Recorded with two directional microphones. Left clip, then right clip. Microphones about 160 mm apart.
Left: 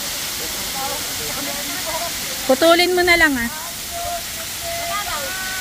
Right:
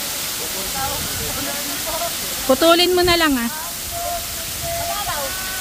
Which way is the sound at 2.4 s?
15° right (ahead or behind).